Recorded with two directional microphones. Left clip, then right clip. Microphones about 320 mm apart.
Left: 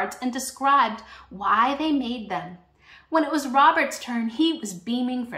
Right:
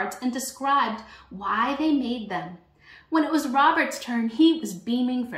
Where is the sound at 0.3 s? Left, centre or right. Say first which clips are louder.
Left 4 dB; centre.